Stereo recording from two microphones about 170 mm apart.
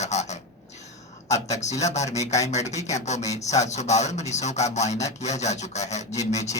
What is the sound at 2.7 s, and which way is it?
Speech, 20° left (ahead or behind).